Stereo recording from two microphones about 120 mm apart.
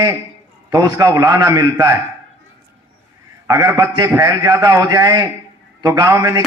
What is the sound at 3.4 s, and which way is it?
A man's voice, 30° right (ahead or behind).